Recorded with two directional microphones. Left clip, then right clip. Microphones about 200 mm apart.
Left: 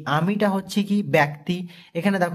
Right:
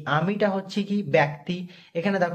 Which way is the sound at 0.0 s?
30° left (ahead or behind).